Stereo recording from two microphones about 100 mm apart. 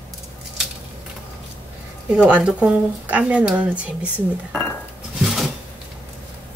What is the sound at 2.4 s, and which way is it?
Speech, 15° right (ahead or behind).